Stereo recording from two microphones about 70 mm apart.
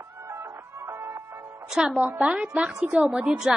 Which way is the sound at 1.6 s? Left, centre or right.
Centre.